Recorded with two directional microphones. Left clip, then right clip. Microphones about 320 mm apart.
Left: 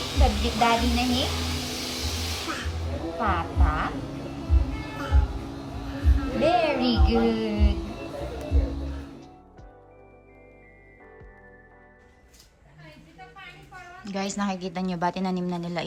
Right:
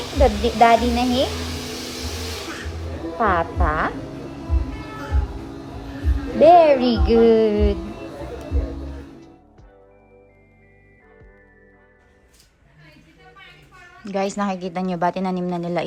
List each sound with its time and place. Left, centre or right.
0.0 s a sound: centre
0.7 s vacuum cleaner: centre
3.6 s music: centre
3.9 s music: centre
7.1 s music: centre
7.8 s music: centre
14.0 s a woman's voice: centre